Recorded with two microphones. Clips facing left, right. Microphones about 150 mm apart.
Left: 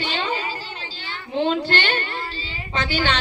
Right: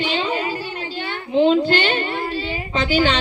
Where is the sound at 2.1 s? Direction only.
60° right (ahead or behind).